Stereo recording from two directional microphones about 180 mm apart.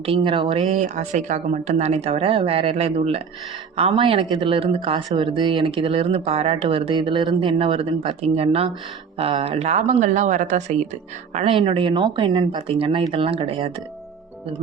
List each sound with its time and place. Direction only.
0.0 s speech: 30° right (ahead or behind)